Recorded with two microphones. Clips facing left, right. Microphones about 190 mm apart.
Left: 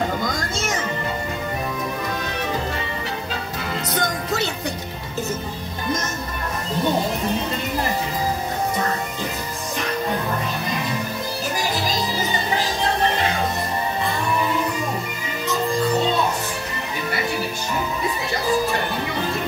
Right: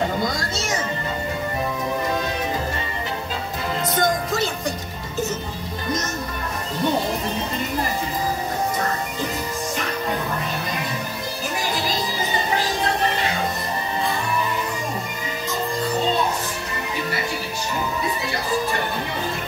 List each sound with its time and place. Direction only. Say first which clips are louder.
3.8 s music: right 6 dB; 70° left (ahead or behind)